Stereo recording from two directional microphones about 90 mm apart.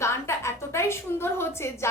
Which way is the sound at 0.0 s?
30° left (ahead or behind).